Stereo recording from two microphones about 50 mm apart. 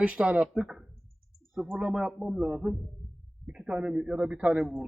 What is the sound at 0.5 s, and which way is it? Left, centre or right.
Speech, centre.